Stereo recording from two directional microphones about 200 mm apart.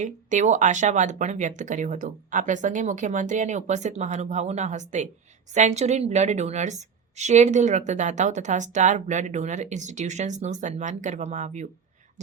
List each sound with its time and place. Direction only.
0.0 s a woman's voice: 35° right (ahead or behind)